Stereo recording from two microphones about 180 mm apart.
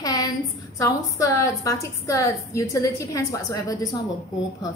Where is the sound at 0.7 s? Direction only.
15° left (ahead or behind).